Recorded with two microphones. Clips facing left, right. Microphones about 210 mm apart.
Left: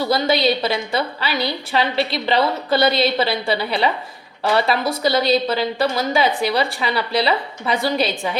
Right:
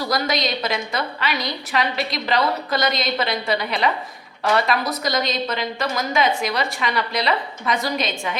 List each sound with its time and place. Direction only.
0.0 s a woman's voice: 30° left (ahead or behind)